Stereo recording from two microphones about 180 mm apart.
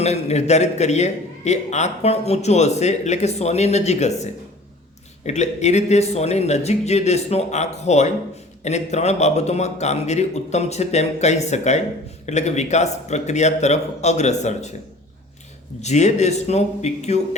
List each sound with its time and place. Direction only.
0.0 s a man's voice: 35° left (ahead or behind)
15.8 s a man's voice: 40° left (ahead or behind)